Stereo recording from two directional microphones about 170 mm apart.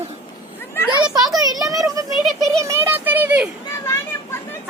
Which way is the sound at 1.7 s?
20° right (ahead or behind).